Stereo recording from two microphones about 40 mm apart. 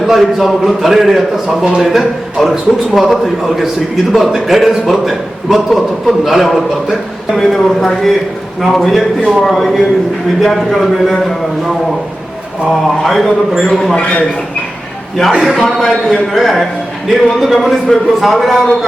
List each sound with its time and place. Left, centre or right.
0.0 s a man's voice: centre
13.0 s a man's voice: centre
13.9 s a man's voice: left
15.4 s a man's voice: centre